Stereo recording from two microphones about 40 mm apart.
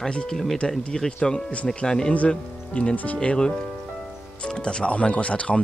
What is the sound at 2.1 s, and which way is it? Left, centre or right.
Speech, left.